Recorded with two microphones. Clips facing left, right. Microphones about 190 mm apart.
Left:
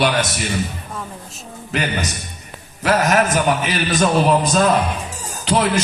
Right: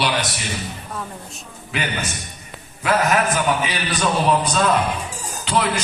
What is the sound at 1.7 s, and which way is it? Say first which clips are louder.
A man's voice: left 3 dB; 40° left (ahead or behind).